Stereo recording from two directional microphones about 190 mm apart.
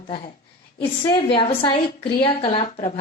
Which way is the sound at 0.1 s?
25° left (ahead or behind).